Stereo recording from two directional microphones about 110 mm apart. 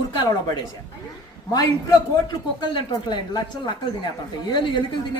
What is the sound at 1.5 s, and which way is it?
A woman's voice, 35° left (ahead or behind).